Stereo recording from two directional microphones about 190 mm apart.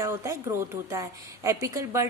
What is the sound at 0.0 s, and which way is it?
A woman's voice, 15° right (ahead or behind).